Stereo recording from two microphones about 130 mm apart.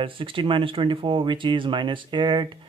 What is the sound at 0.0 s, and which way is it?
Speech, 40° right (ahead or behind).